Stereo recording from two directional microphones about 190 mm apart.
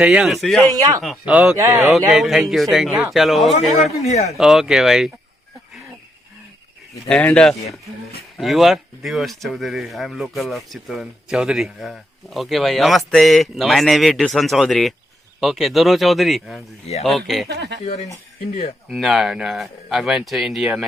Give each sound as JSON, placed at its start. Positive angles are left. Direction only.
{"t": 0.0, "sound": "speech", "side_deg": -5}
{"t": 0.6, "sound": "speech", "side_deg": -20}
{"t": 1.0, "sound": "speech", "side_deg": -5}
{"t": 1.9, "sound": "speech", "side_deg": 0}
{"t": 4.0, "sound": "speech", "side_deg": 35}
{"t": 4.4, "sound": "speech", "side_deg": 0}
{"t": 7.1, "sound": "speech", "side_deg": 5}
{"t": 17.5, "sound": "speech", "side_deg": -60}
{"t": 18.9, "sound": "speech", "side_deg": 0}